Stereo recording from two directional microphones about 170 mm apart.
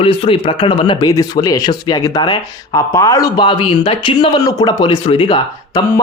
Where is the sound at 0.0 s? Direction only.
35° left (ahead or behind).